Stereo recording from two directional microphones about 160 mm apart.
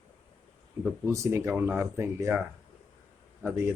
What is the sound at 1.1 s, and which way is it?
Speech, 15° right (ahead or behind).